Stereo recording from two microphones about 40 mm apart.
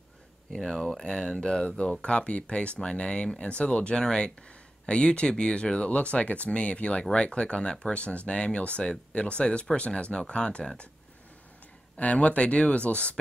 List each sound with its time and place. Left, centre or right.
0.7 s speech: centre
12.0 s speech: left